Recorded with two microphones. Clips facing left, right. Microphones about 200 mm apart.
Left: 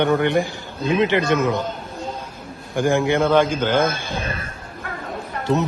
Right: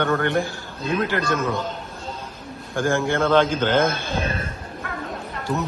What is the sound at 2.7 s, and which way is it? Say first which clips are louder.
A man's voice: left 3 dB; 15° left (ahead or behind).